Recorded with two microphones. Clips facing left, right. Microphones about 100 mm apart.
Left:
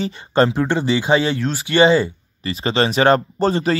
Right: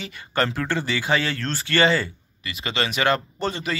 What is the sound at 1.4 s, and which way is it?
Speech, 15° left (ahead or behind).